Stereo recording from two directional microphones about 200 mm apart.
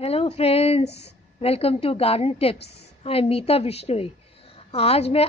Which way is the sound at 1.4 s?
30° left (ahead or behind).